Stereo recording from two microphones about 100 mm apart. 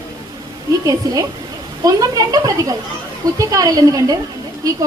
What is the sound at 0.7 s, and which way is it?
A woman's voice, 35° right (ahead or behind).